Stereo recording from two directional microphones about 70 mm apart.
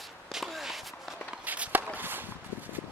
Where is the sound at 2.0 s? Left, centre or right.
Right.